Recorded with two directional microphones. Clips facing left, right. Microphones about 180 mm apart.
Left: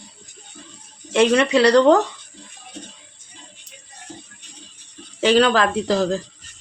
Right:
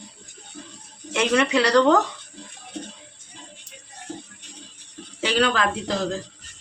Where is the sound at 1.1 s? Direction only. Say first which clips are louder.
Left 5 dB; 30° left (ahead or behind).